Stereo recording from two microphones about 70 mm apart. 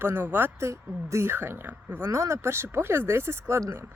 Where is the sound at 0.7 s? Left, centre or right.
Right.